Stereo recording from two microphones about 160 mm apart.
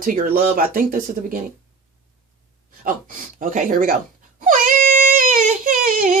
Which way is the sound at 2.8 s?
60° right (ahead or behind).